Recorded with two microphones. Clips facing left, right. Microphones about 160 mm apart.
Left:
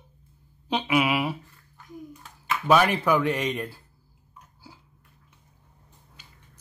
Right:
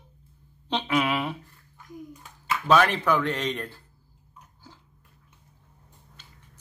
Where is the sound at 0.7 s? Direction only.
10° left (ahead or behind).